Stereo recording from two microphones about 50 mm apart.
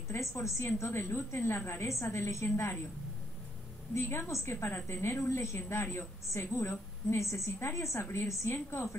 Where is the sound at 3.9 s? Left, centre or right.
Left.